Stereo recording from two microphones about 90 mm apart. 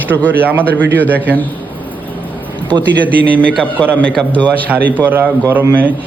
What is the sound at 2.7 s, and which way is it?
Speech, 55° right (ahead or behind).